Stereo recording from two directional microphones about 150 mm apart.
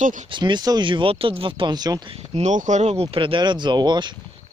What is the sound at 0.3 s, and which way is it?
Speech, 30° right (ahead or behind).